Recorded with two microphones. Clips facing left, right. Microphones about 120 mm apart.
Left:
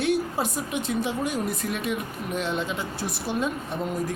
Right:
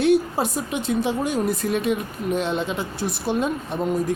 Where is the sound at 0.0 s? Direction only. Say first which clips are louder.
Right 6 dB; 30° right (ahead or behind).